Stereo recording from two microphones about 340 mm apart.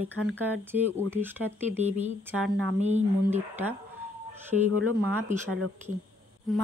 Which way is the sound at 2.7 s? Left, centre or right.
Centre.